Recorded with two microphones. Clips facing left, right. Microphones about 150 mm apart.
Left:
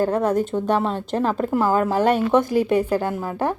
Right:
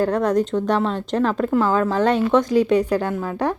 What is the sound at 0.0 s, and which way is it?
A woman's voice, 5° left (ahead or behind).